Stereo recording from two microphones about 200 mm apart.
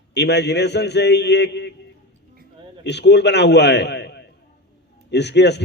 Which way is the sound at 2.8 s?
60° left (ahead or behind).